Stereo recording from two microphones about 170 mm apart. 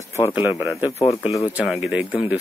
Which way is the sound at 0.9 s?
30° left (ahead or behind).